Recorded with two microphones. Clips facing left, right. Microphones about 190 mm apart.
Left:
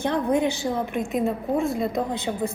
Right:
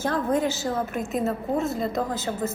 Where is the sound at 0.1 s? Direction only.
15° left (ahead or behind).